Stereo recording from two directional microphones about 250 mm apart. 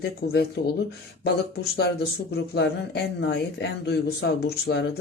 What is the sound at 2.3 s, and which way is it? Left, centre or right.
Speech, left.